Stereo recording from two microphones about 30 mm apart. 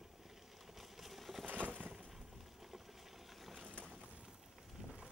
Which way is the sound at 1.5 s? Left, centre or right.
Right.